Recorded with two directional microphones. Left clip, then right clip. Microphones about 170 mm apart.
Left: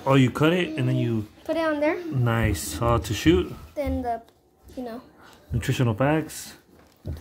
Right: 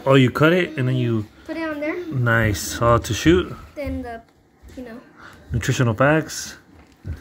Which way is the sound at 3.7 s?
30° left (ahead or behind).